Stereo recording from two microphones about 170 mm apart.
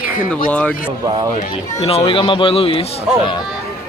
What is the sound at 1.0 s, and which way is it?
Speech, 25° right (ahead or behind).